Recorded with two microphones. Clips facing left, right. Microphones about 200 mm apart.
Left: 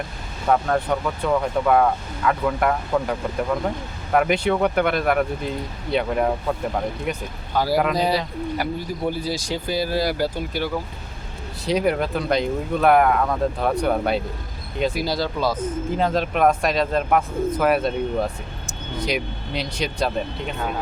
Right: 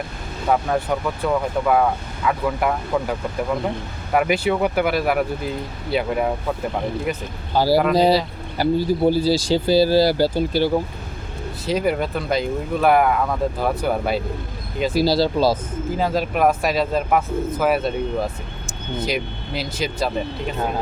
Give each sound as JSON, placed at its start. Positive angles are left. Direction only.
{"t": 0.4, "sound": "speech", "side_deg": -5}
{"t": 7.5, "sound": "speech", "side_deg": -30}
{"t": 11.6, "sound": "speech", "side_deg": 0}
{"t": 14.9, "sound": "speech", "side_deg": -30}
{"t": 16.0, "sound": "speech", "side_deg": -5}